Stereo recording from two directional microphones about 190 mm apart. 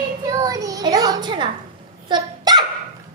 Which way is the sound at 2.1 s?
20° right (ahead or behind).